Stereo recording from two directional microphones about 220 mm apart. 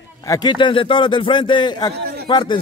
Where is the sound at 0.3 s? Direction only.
20° left (ahead or behind).